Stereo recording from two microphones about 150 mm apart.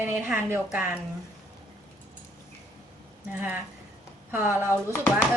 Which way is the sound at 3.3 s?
10° right (ahead or behind).